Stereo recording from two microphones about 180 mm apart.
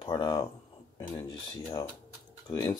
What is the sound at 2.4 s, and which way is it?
Speech, 20° left (ahead or behind).